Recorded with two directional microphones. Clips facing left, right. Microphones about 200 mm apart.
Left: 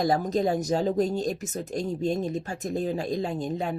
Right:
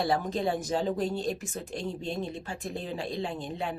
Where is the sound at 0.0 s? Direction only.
40° left (ahead or behind).